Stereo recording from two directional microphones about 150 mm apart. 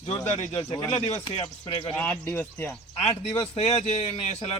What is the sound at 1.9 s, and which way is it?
Speech, 10° left (ahead or behind).